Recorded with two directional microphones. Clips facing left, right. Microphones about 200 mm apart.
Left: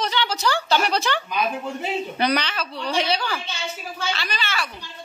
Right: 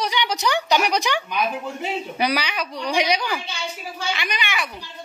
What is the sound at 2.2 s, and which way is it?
A woman's voice, 10° right (ahead or behind).